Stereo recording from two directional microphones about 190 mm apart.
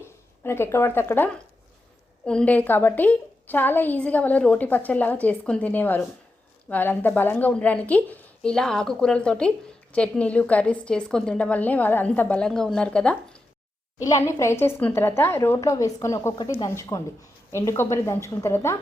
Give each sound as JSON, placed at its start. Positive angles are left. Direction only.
{"t": 0.0, "sound": "a woman's voice", "side_deg": 15}
{"t": 14.0, "sound": "a woman's voice", "side_deg": 15}